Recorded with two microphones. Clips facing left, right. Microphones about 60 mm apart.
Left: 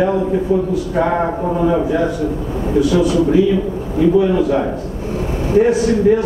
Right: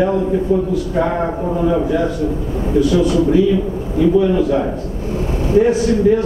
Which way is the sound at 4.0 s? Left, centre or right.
Left.